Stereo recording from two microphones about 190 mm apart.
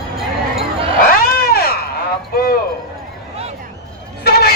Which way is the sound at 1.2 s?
55° left (ahead or behind).